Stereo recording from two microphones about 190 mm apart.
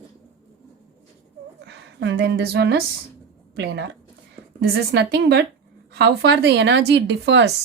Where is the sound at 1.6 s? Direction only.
65° right (ahead or behind).